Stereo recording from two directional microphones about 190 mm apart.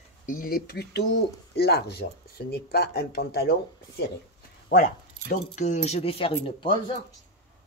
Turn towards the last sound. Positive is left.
turn(degrees=25)  # may be behind; listen again after turning